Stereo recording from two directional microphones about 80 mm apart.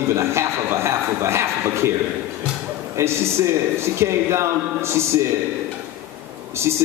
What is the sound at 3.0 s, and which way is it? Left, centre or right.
A man's voice, right.